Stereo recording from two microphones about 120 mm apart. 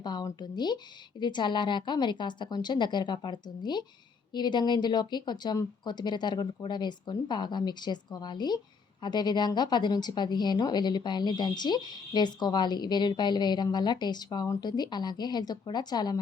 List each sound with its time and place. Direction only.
0.0 s speech: 35° left (ahead or behind)